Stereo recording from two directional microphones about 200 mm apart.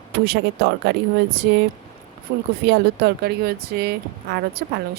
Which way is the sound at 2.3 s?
40° right (ahead or behind).